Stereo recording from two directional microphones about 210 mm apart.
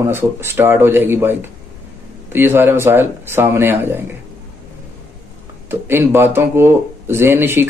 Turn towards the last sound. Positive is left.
turn(degrees=-10)  # may be behind; listen again after turning